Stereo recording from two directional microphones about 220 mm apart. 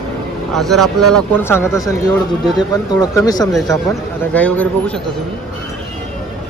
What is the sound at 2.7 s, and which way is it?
Speech, 15° left (ahead or behind).